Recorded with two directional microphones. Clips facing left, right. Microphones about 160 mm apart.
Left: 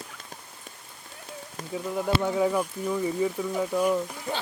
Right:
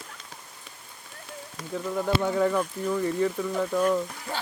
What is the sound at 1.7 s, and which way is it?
Speech, 10° left (ahead or behind).